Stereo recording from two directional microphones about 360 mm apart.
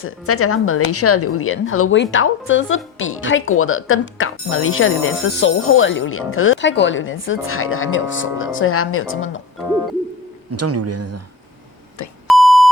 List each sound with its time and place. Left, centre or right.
0.0 s a woman's voice: left
10.6 s speech: right
12.0 s beep: left
12.3 s beep: centre